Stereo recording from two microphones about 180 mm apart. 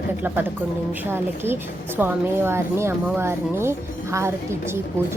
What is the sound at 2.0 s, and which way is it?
A woman's voice, 10° right (ahead or behind).